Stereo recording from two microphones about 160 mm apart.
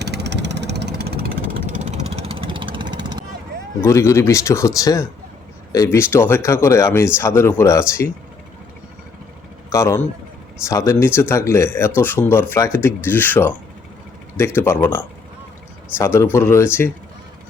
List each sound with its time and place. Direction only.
0.0 s vehicle: 90° right
1.7 s vehicle: 45° right (ahead or behind); by 3.2 s 25° right (ahead or behind)
3.8 s speech: 15° left (ahead or behind)
9.6 s speech: 15° left (ahead or behind)